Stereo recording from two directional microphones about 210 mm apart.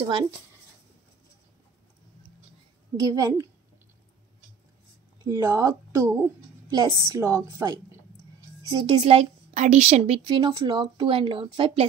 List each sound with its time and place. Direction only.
3.0 s a woman's voice: 15° right (ahead or behind)
5.2 s a woman's voice: 15° right (ahead or behind)